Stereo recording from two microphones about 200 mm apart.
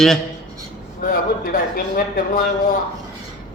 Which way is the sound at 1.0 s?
45° left (ahead or behind).